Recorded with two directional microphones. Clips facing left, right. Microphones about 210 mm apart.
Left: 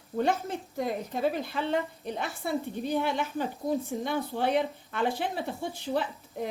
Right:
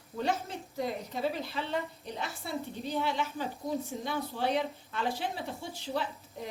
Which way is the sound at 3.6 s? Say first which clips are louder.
Left 4 dB; 25° left (ahead or behind).